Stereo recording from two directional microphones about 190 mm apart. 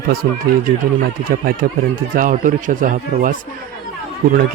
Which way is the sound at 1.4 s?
50° right (ahead or behind).